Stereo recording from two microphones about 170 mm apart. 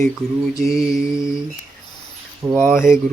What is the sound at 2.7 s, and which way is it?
Mantra, 5° right (ahead or behind).